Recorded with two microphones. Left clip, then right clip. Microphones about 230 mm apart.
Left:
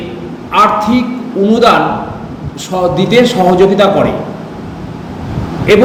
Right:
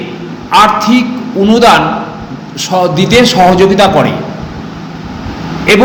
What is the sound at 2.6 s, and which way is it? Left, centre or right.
A man's voice, right.